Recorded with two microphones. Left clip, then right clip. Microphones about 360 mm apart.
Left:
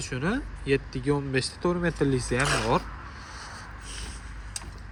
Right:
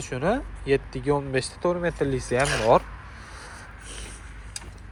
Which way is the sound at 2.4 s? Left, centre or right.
Left.